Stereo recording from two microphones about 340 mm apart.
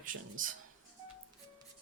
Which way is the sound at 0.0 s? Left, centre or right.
Right.